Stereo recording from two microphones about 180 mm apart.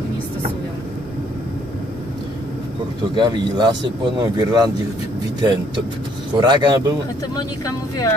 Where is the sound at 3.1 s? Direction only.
25° right (ahead or behind).